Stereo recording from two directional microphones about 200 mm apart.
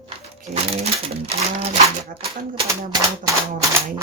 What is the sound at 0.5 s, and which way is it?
Speech, 35° right (ahead or behind).